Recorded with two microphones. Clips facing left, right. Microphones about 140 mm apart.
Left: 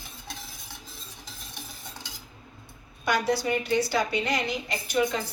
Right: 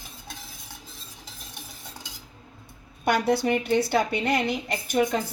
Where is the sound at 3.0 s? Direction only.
55° right (ahead or behind).